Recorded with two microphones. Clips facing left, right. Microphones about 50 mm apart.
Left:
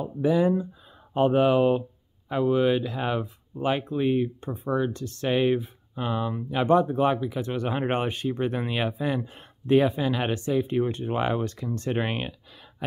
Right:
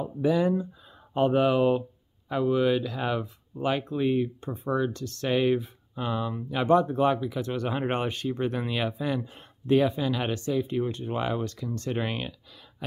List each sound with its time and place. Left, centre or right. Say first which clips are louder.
0.0 s speech: left 2 dB; centre